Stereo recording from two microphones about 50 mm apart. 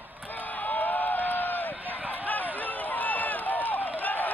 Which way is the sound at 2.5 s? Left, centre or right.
Left.